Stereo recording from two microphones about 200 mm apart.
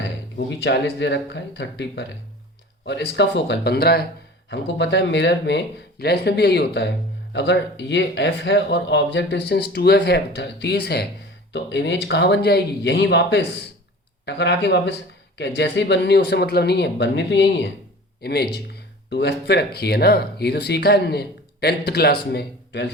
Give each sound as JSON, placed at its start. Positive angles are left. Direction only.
{"t": 0.3, "sound": "speech", "side_deg": 60}